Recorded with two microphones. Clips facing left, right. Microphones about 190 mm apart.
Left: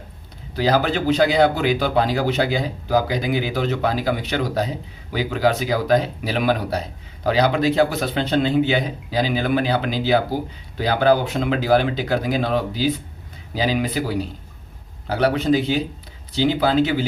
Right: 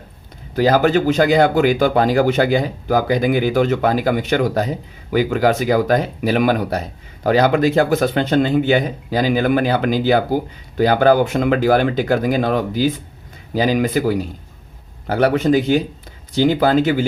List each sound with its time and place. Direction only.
0.5 s speech: 50° right (ahead or behind)